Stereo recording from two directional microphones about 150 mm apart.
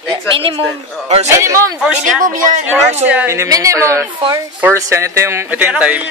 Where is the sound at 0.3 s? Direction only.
35° right (ahead or behind).